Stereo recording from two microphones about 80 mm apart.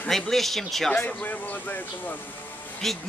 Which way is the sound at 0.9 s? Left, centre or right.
Centre.